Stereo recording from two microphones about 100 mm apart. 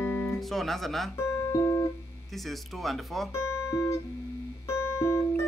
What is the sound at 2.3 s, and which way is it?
Speech, centre (ahead or behind).